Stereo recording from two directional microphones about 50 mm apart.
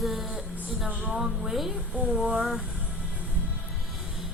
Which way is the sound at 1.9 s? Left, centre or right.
Right.